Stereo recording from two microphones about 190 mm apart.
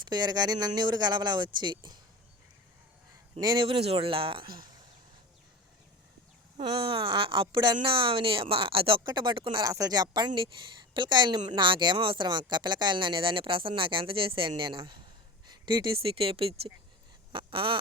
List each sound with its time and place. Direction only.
0.1 s speech: 20° right (ahead or behind)
3.4 s speech: 25° right (ahead or behind)
6.8 s speech: 25° right (ahead or behind)
17.3 s a sound: 25° right (ahead or behind)